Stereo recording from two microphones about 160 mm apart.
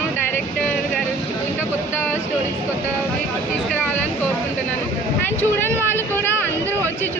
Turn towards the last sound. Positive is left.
turn(degrees=15)  # may be behind; listen again after turning